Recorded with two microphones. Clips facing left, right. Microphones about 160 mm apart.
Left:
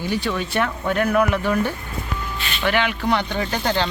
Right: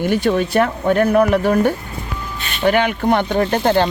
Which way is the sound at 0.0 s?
50° right (ahead or behind).